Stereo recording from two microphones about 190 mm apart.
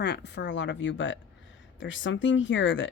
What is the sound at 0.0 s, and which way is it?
Speech, 65° left (ahead or behind).